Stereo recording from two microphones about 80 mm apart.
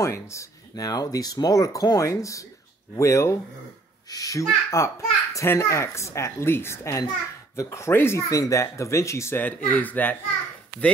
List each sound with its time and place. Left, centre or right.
0.0 s a child's voice: left
8.3 s a child's voice: left
9.4 s speech: left